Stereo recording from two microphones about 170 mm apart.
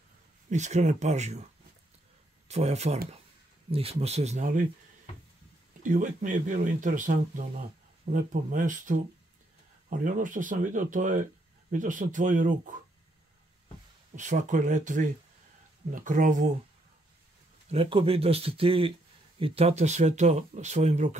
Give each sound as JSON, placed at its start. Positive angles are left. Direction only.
{"t": 0.5, "sound": "speech", "side_deg": -45}
{"t": 2.4, "sound": "speech", "side_deg": -40}
{"t": 5.8, "sound": "speech", "side_deg": -50}
{"t": 14.1, "sound": "speech", "side_deg": -45}
{"t": 17.6, "sound": "speech", "side_deg": -30}